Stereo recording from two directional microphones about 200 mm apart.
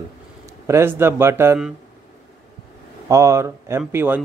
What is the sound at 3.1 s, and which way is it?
Speech, 15° right (ahead or behind).